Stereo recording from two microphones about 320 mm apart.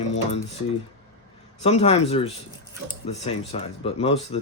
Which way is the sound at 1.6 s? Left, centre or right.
Centre.